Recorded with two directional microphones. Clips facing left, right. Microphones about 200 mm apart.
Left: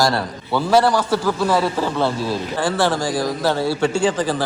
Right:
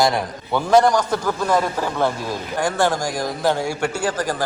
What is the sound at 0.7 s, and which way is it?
Speech, 5° left (ahead or behind).